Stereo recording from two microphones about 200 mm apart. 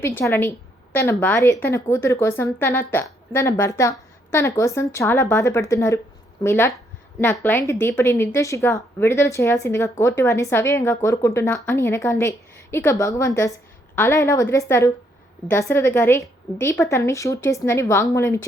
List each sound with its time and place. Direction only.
0.2 s a woman's voice: 10° left (ahead or behind)